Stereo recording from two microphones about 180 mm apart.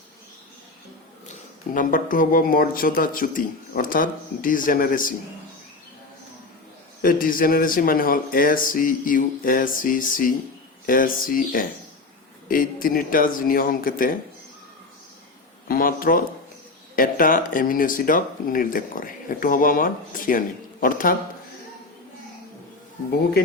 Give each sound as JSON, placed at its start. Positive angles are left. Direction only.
{"t": 1.3, "sound": "speech", "side_deg": 45}
{"t": 7.0, "sound": "speech", "side_deg": 50}
{"t": 15.7, "sound": "speech", "side_deg": 50}